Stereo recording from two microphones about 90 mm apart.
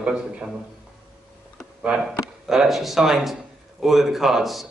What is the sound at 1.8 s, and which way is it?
A man's voice, 10° right (ahead or behind).